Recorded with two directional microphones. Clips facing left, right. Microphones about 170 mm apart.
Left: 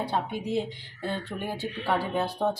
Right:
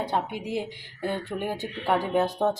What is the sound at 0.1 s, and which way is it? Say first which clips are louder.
Speech: even; 15° right (ahead or behind).